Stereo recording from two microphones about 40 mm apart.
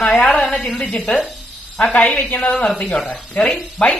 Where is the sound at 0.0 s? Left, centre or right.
Left.